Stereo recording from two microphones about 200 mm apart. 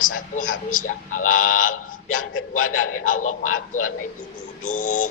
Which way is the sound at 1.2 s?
90° left.